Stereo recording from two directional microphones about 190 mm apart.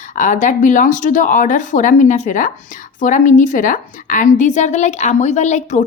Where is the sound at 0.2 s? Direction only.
40° left (ahead or behind).